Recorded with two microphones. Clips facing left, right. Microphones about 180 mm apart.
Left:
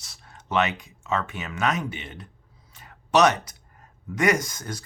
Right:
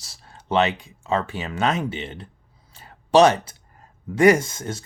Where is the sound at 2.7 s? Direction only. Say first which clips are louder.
Right 5 dB; 30° right (ahead or behind).